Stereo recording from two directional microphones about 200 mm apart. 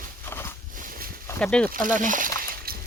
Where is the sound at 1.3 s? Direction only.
5° left (ahead or behind).